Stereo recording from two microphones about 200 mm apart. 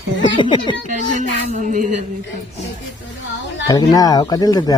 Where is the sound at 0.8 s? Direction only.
35° right (ahead or behind).